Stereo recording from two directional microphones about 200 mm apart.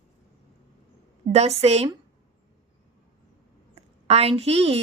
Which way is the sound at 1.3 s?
30° right (ahead or behind).